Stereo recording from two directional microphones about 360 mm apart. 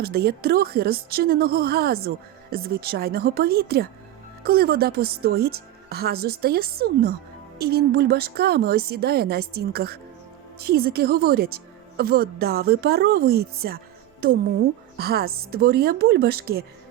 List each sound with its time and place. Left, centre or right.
0.0 s a woman's voice: right